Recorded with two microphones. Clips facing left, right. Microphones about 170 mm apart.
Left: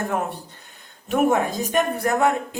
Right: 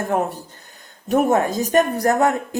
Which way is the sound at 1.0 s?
40° right (ahead or behind).